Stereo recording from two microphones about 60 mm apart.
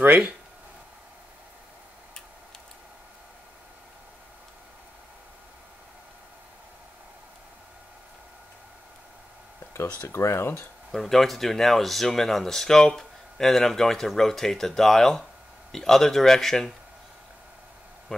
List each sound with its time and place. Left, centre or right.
9.8 s speech: left
10.9 s speech: centre